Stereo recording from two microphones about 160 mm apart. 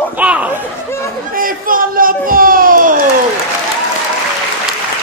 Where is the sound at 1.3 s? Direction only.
60° right (ahead or behind).